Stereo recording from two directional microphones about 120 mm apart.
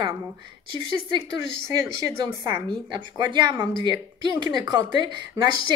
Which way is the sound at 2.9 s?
40° right (ahead or behind).